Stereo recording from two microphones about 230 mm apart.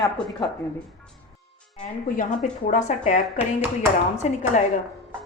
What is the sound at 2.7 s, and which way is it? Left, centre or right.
A woman's voice, left.